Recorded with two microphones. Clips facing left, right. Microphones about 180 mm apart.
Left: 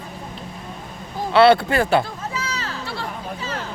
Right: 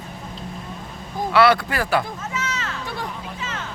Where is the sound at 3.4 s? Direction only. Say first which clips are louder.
Left 2 dB; 35° left (ahead or behind).